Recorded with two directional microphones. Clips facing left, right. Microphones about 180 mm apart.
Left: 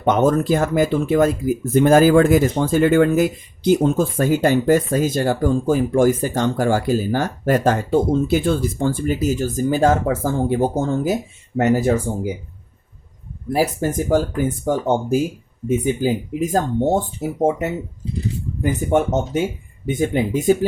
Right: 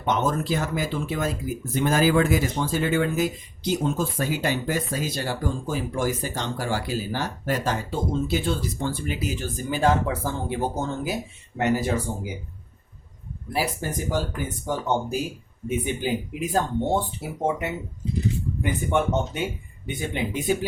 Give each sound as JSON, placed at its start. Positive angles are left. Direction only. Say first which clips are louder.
{"t": 0.0, "sound": "speech", "louder": "left 8 dB", "side_deg": 50}
{"t": 13.5, "sound": "speech", "louder": "left 8 dB", "side_deg": 45}